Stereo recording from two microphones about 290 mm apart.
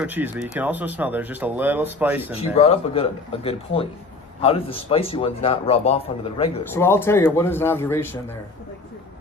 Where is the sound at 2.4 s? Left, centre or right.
Left.